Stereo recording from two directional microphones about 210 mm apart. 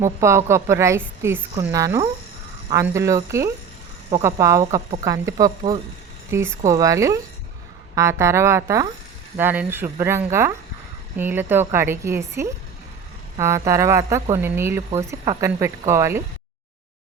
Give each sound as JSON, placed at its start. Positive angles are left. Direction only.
{"t": 0.0, "sound": "a woman's voice", "side_deg": -15}